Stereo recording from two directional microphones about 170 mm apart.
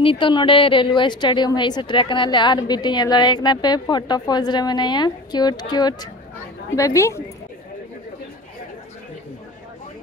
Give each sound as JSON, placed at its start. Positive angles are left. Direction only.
{"t": 0.0, "sound": "a woman's voice", "side_deg": 30}